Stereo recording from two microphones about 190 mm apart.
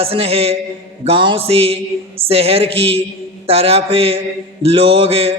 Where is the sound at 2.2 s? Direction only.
30° right (ahead or behind).